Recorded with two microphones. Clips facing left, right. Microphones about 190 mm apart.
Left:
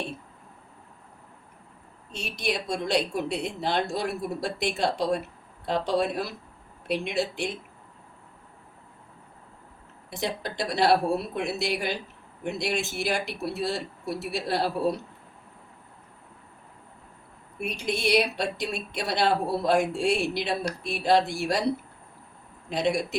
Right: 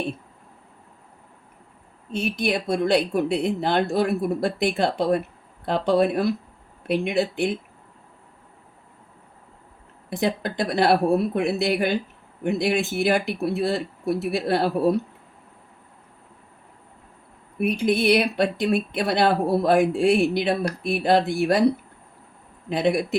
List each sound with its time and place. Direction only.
2.1 s speech: 55° right (ahead or behind)
10.1 s speech: 55° right (ahead or behind)
17.6 s speech: 55° right (ahead or behind)
22.7 s speech: 60° right (ahead or behind)